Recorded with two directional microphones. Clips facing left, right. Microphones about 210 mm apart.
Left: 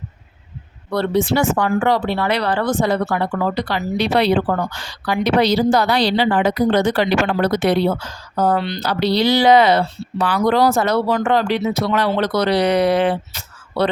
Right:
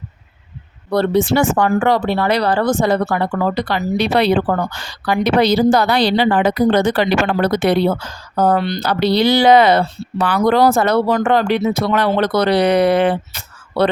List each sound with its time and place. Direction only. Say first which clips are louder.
0.9 s speech: right 4 dB; 40° right (ahead or behind)
1.3 s speech: right 2 dB; 50° right (ahead or behind)